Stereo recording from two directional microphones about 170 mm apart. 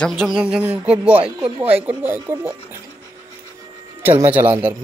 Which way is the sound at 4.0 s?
10° right (ahead or behind).